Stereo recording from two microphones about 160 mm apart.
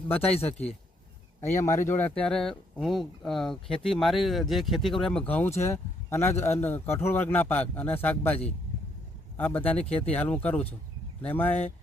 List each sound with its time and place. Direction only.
0.3 s speech: 40° left (ahead or behind)
1.9 s a man's voice: 10° left (ahead or behind)
9.4 s a man's voice: 10° left (ahead or behind)